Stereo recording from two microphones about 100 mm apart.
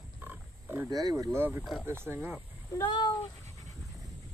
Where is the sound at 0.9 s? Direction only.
40° right (ahead or behind).